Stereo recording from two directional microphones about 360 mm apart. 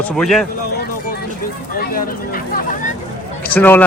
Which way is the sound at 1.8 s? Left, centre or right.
Left.